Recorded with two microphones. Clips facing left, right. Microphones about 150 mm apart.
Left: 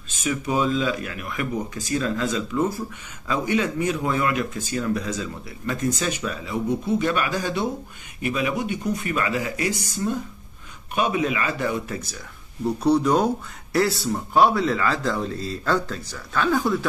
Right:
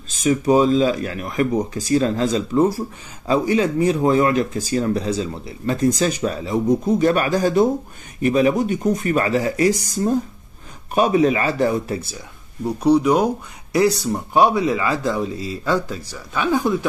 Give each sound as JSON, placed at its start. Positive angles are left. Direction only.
{"t": 0.1, "sound": "speech", "side_deg": -35}
{"t": 12.6, "sound": "speech", "side_deg": -10}